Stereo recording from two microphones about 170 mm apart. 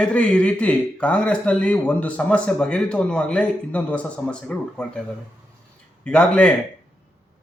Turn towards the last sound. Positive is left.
turn(degrees=5)  # may be behind; listen again after turning